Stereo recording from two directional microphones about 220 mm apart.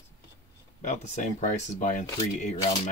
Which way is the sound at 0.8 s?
35° left (ahead or behind).